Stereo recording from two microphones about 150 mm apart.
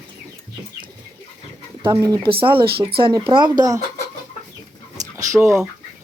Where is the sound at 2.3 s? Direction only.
35° right (ahead or behind).